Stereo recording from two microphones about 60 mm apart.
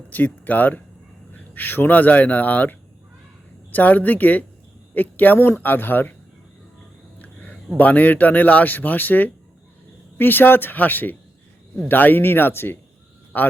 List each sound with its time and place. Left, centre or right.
0.1 s speech: left
7.2 s a sound: left
7.8 s speech: left